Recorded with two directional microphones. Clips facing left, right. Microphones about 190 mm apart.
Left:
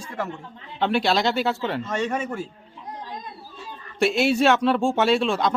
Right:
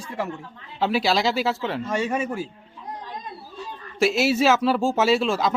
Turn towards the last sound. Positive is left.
turn(degrees=0)  # may be behind; listen again after turning